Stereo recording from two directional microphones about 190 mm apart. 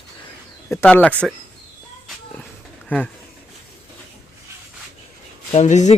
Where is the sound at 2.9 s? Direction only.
10° left (ahead or behind).